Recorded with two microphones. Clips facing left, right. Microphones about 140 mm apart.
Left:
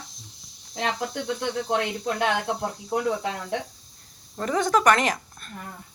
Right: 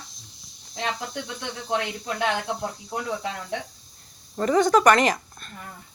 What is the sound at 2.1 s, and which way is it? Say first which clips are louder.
Speech: right 1 dB; 5° left (ahead or behind).